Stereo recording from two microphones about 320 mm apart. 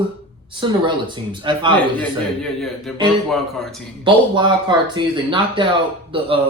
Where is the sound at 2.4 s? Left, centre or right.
Centre.